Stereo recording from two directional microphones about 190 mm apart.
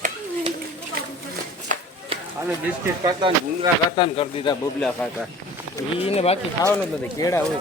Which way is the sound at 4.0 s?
30° left (ahead or behind).